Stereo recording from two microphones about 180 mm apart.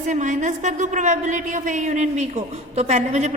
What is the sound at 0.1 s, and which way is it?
A woman's voice, 45° right (ahead or behind).